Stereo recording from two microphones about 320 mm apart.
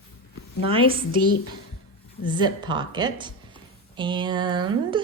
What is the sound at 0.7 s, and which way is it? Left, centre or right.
Speech, centre.